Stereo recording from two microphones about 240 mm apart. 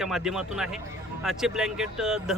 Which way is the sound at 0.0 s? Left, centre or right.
Centre.